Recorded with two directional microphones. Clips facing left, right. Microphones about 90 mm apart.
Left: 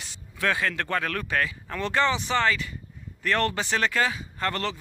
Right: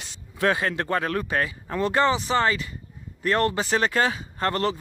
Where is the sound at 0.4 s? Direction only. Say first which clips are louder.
Right 3 dB; 30° right (ahead or behind).